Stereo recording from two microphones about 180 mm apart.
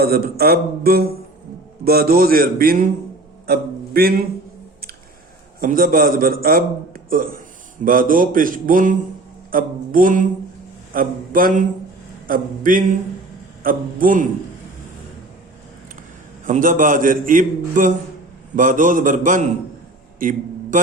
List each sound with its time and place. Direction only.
0.0 s speech: 60° right (ahead or behind)
5.5 s a man's voice: 50° right (ahead or behind)
16.5 s a man's voice: 45° right (ahead or behind)
20.1 s a sound: 50° right (ahead or behind)